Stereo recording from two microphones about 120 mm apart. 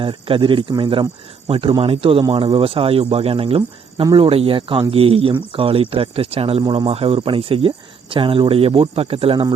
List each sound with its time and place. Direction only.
0.0 s speech: 45° right (ahead or behind)